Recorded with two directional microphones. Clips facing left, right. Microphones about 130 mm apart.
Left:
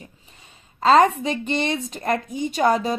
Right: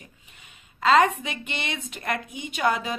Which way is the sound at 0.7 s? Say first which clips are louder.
Left 4 dB; 35° left (ahead or behind).